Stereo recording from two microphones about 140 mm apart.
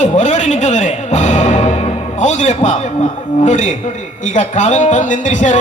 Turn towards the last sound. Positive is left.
turn(degrees=60)  # may be behind; listen again after turning